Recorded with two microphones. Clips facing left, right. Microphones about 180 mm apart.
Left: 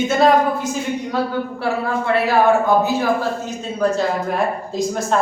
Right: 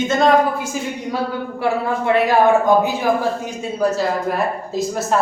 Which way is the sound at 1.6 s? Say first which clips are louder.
Right 4 dB; 15° right (ahead or behind).